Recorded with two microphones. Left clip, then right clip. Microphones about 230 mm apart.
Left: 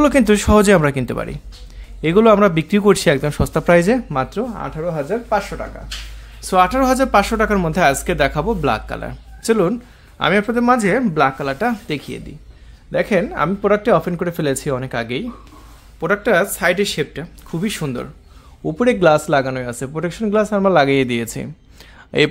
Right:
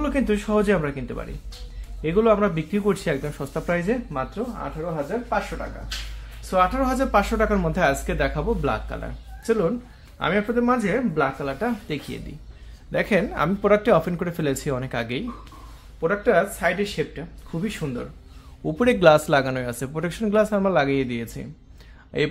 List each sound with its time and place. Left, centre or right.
0.0 s speech: left
6.5 s speech: left
12.9 s a man's voice: centre
16.0 s speech: left
18.6 s a man's voice: centre; by 22.3 s left